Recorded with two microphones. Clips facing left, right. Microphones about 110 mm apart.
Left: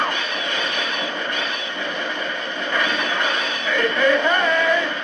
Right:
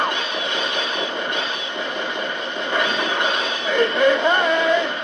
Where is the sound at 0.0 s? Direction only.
20° right (ahead or behind).